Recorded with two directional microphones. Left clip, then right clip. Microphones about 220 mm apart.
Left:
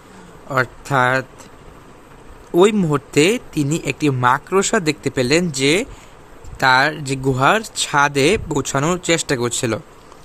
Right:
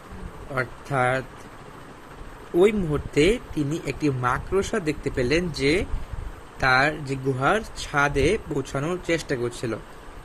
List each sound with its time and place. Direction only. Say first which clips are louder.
0.5 s speech: left 8 dB; 40° left (ahead or behind)
2.6 s speech: left 6 dB; 40° left (ahead or behind)